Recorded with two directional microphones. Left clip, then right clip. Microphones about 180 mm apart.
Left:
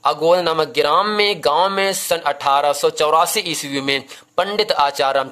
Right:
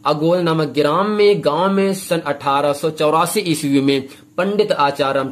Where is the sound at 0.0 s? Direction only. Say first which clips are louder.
Left 1 dB; 35° left (ahead or behind).